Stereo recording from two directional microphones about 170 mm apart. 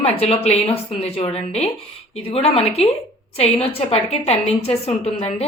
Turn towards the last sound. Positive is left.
turn(degrees=35)  # may be behind; listen again after turning